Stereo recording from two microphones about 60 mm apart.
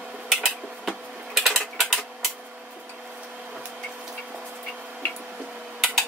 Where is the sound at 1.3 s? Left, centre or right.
Centre.